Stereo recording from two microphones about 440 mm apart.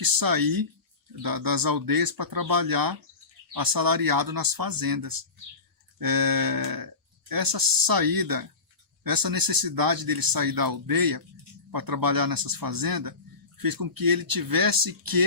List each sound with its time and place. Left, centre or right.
0.0 s speech: right